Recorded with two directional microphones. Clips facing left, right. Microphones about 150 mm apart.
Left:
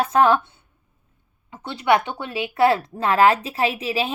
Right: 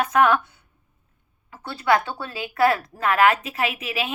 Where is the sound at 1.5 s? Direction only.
20° left (ahead or behind).